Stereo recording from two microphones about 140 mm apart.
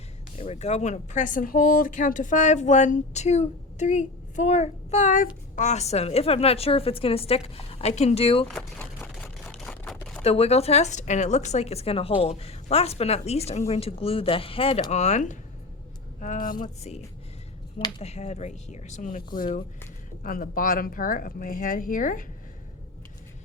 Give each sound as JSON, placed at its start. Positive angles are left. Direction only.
{"t": 0.3, "sound": "speech", "side_deg": 45}
{"t": 5.5, "sound": "a woman's voice", "side_deg": 55}
{"t": 8.6, "sound": "a sound", "side_deg": 5}
{"t": 10.2, "sound": "a woman's voice", "side_deg": 45}
{"t": 14.8, "sound": "speech", "side_deg": 55}
{"t": 16.2, "sound": "speech", "side_deg": 70}
{"t": 18.0, "sound": "speech", "side_deg": 50}